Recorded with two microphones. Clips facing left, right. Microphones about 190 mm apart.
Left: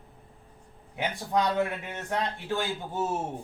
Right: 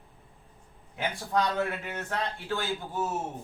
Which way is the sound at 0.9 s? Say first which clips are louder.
Left 1 dB; 20° left (ahead or behind).